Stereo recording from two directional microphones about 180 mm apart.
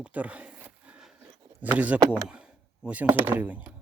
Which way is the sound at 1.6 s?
10° right (ahead or behind).